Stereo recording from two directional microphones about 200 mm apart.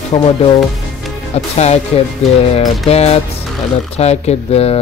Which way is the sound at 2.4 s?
30° left (ahead or behind).